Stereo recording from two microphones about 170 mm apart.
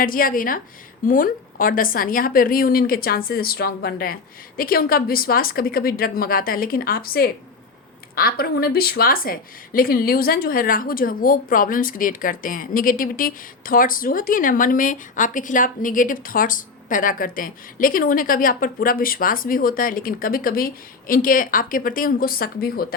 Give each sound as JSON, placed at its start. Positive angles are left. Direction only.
{"t": 0.0, "sound": "a woman's voice", "side_deg": 55}